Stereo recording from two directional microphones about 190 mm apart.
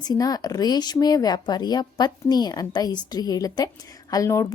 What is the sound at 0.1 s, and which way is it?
A woman's voice, 20° left (ahead or behind).